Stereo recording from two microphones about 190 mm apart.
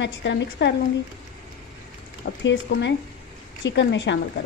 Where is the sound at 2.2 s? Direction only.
65° left (ahead or behind).